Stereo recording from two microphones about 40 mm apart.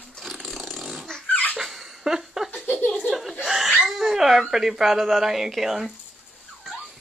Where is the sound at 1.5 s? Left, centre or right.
Centre.